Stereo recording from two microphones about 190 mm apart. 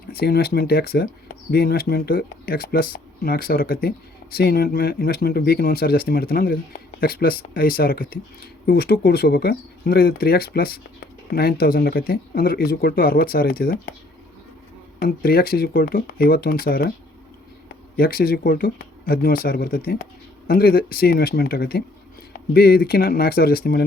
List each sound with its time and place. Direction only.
0.2 s speech: 55° left (ahead or behind)
14.9 s speech: 50° left (ahead or behind)
17.9 s speech: 50° left (ahead or behind)